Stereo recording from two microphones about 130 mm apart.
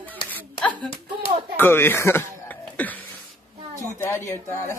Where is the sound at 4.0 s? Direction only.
20° left (ahead or behind).